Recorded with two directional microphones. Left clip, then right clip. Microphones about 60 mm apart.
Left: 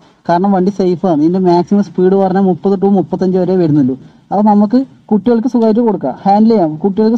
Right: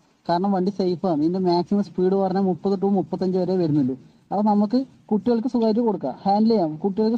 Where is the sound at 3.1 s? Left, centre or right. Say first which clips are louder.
Left 10 dB; right.